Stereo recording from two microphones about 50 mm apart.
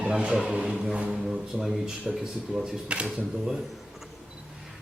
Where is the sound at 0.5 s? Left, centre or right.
Right.